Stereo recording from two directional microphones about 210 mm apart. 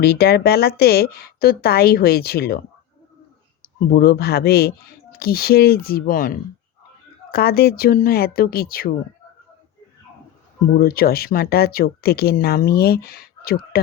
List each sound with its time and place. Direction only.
0.0 s speech: 50° left (ahead or behind)
3.9 s speech: 45° left (ahead or behind)
10.8 s speech: 45° left (ahead or behind)